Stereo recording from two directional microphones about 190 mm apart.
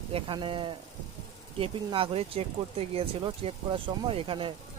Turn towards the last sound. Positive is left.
turn(degrees=-25)  # may be behind; listen again after turning